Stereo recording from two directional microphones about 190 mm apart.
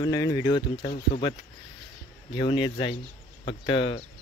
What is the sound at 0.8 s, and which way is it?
Speech, 50° left (ahead or behind).